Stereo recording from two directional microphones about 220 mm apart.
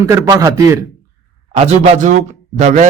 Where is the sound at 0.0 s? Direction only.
15° right (ahead or behind).